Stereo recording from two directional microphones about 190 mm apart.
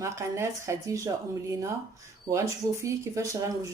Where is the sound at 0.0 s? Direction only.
15° right (ahead or behind).